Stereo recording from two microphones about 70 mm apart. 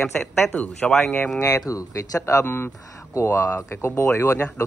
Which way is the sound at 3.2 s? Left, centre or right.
Left.